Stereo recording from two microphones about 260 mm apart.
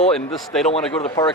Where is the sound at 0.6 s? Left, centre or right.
Left.